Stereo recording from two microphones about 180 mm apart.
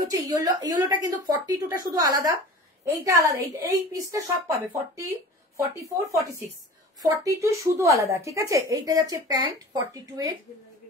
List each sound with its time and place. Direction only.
0.0 s a woman's voice: 20° right (ahead or behind)